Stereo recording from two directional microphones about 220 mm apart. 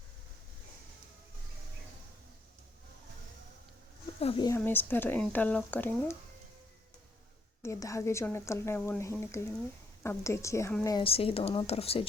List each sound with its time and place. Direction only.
4.2 s speech: 20° left (ahead or behind)
7.6 s a woman's voice: 15° left (ahead or behind)